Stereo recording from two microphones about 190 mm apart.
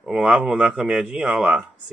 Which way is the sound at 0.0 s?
5° right (ahead or behind).